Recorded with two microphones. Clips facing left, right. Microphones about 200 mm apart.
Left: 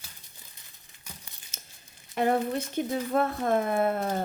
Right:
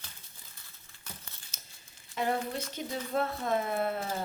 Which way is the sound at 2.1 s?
55° left (ahead or behind).